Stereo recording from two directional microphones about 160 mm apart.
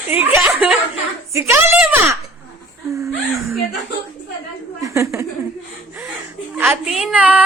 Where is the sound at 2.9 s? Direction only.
20° right (ahead or behind).